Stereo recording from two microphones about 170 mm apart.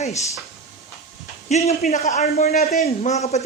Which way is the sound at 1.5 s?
45° left (ahead or behind).